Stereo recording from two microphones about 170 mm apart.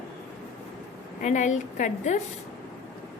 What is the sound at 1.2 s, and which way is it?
A woman's voice, 45° left (ahead or behind).